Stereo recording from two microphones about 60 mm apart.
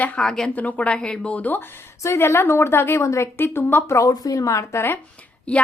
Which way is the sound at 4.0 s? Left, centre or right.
Left.